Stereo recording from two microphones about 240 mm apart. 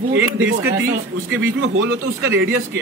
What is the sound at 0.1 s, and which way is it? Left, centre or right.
Speech, right.